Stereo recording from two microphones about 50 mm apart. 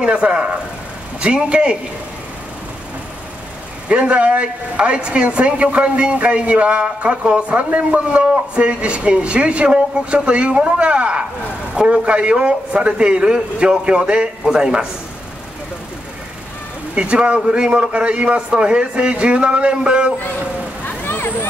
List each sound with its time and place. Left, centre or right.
0.0 s a woman's voice: right
3.9 s a woman's voice: right
16.9 s a woman's voice: right
20.8 s vehicle: left